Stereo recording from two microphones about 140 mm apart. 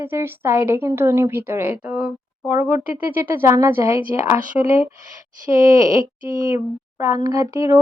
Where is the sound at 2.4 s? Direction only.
15° right (ahead or behind).